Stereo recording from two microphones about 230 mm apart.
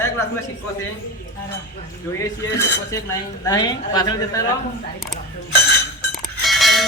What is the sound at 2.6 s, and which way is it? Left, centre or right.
A woman's voice, centre.